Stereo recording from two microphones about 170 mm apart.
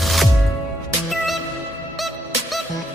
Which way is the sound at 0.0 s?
Centre (ahead or behind).